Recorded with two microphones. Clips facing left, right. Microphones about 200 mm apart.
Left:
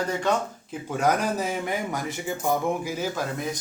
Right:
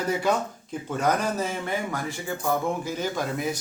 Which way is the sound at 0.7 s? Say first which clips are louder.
Left 1 dB; 10° left (ahead or behind).